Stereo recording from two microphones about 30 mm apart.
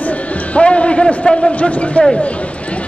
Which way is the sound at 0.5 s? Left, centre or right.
Left.